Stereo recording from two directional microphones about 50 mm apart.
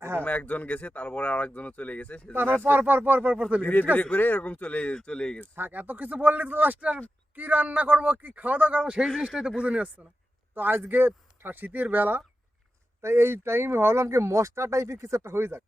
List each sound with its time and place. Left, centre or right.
0.2 s speech: left
2.3 s speech: right
3.6 s speech: left; by 5.5 s centre
5.5 s speech: right
9.2 s speech: centre
9.6 s speech: right
10.5 s speech: right
13.0 s speech: right